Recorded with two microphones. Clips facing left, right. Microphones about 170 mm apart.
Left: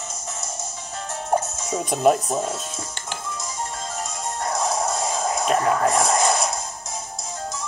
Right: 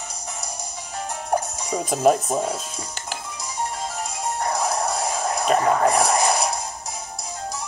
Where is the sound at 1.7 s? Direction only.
Centre (ahead or behind).